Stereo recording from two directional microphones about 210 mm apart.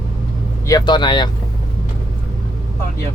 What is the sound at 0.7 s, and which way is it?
Speech, 20° left (ahead or behind).